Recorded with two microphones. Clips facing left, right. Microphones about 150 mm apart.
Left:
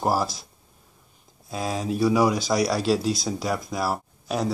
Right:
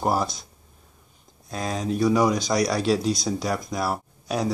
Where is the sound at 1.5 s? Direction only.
5° left (ahead or behind).